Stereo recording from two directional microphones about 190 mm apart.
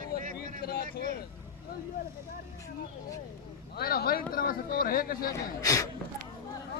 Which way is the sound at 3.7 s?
55° left (ahead or behind).